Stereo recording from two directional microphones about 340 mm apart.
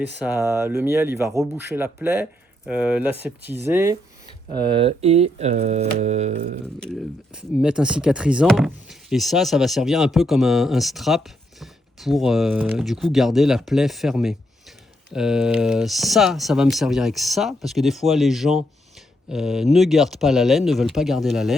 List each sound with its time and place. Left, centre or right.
0.2 s speech: centre
7.6 s speech: centre